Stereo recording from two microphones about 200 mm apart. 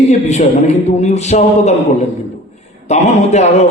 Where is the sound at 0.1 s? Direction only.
35° left (ahead or behind).